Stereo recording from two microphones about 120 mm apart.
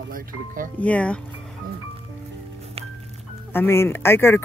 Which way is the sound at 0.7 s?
10° left (ahead or behind).